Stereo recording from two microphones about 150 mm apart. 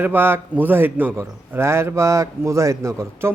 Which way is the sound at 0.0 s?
15° right (ahead or behind).